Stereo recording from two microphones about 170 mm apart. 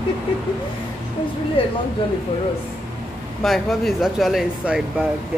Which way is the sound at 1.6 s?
30° left (ahead or behind).